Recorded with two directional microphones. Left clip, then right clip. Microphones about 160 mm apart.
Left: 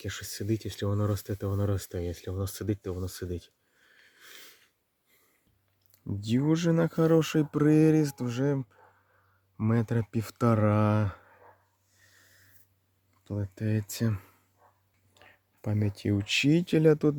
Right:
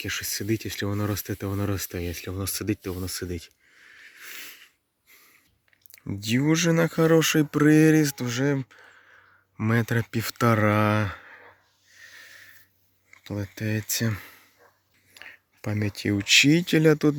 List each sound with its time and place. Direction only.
0.0 s speech: 15° right (ahead or behind)
5.9 s speech: centre (ahead or behind)
13.2 s speech: centre (ahead or behind)